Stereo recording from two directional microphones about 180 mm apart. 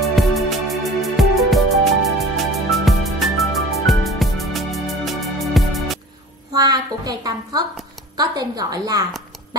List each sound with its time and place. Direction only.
0.0 s music: centre (ahead or behind)
6.5 s a sound: 20° right (ahead or behind)
8.2 s a woman's voice: 20° right (ahead or behind)